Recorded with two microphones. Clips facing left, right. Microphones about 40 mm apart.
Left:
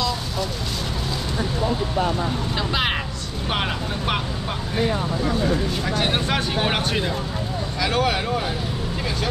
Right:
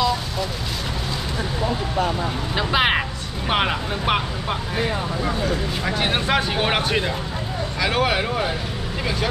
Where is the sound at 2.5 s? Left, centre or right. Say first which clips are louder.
Right 6 dB; centre.